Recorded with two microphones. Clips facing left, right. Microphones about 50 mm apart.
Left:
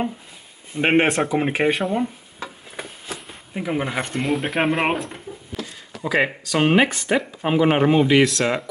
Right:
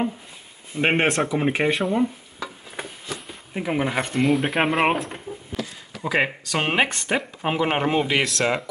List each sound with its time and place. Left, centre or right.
0.7 s speech: centre
3.5 s speech: centre